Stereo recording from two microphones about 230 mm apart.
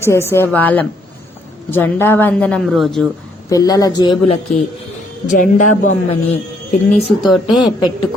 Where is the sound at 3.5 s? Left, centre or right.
Centre.